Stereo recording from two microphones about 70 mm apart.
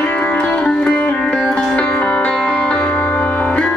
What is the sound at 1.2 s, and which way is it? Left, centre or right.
Sitar, centre.